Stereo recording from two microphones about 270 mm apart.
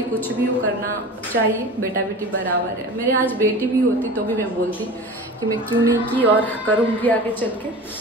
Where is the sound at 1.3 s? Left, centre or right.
Right.